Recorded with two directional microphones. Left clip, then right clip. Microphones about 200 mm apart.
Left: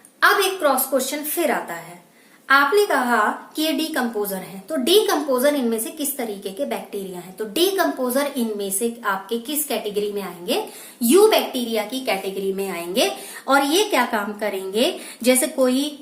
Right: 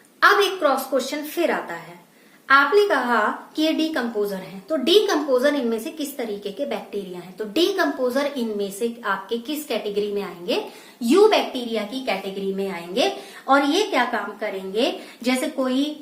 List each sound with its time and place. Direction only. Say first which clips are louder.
0.2 s a woman's voice: even; 10° left (ahead or behind)
11.0 s a woman's voice: left 1 dB; 25° left (ahead or behind)
12.5 s a woman's voice: even; 40° left (ahead or behind)